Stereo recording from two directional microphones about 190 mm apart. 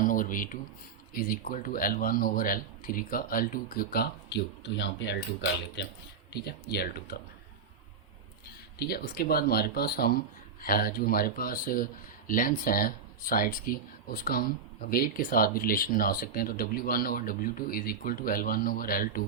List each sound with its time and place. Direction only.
0.0 s a sound: 45° left (ahead or behind)
1.1 s speech: 50° left (ahead or behind)
8.8 s speech: 55° left (ahead or behind)